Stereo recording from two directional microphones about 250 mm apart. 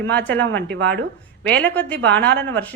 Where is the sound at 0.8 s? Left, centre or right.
Right.